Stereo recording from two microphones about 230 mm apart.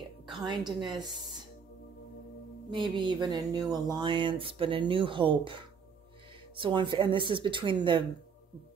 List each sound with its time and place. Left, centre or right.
0.5 s speech: centre
2.7 s speech: right